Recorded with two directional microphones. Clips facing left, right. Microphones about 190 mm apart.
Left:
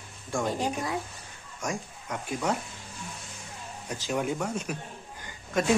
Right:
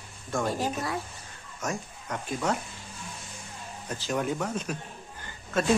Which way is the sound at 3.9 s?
10° left (ahead or behind).